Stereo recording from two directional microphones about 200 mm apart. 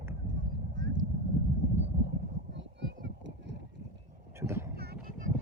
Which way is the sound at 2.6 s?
60° right (ahead or behind).